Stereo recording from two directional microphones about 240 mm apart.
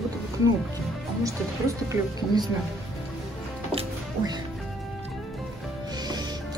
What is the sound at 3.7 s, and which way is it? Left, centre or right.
Music, right.